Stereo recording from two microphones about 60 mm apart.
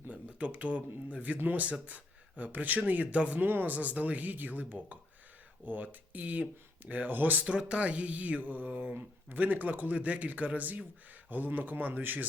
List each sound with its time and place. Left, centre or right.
0.1 s speech: right
7.5 s speech: right